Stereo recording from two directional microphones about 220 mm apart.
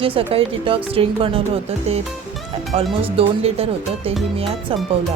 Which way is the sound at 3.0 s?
25° right (ahead or behind).